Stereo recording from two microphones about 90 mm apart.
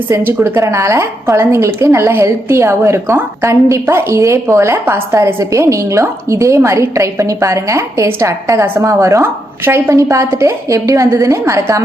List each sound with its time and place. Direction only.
0.1 s a woman's voice: 20° right (ahead or behind)